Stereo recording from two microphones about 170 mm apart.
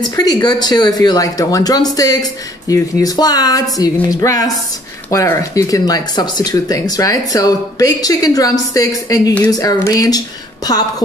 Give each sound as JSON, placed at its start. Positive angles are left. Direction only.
{"t": 0.1, "sound": "speech", "side_deg": 25}